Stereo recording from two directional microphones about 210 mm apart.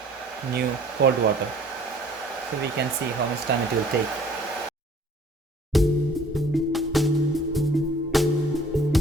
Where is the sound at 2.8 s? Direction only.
50° right (ahead or behind).